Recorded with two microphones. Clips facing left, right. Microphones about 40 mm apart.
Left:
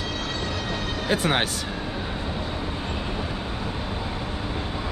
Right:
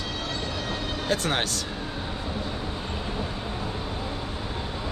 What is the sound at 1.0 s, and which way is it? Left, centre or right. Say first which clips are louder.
Speech: left 3 dB; centre.